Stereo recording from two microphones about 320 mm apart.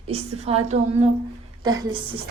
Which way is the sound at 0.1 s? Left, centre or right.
Centre.